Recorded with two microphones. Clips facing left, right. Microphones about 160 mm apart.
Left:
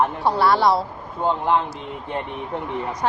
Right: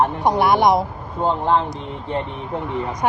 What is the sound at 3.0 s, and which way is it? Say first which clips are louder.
Speech: right 2 dB; 15° right (ahead or behind).